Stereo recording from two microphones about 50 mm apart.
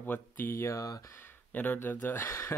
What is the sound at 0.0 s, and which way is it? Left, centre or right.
Speech, left.